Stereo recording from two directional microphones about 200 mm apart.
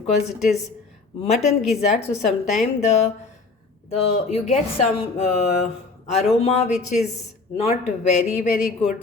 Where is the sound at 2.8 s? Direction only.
35° left (ahead or behind).